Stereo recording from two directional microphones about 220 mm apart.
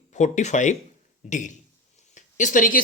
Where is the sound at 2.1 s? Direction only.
35° left (ahead or behind).